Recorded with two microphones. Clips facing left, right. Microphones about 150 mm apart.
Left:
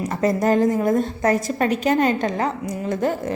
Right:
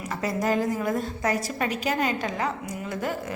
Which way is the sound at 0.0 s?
45° left (ahead or behind).